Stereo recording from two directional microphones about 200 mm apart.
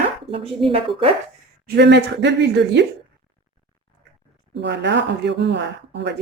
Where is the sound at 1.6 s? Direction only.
55° right (ahead or behind).